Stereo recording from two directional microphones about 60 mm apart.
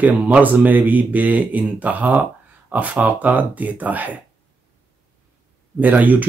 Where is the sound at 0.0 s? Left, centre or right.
Right.